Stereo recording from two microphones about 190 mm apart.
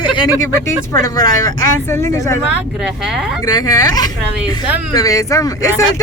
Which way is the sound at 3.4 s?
20° left (ahead or behind).